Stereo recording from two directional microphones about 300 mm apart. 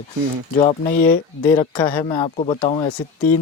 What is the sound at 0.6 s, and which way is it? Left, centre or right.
Speech, left.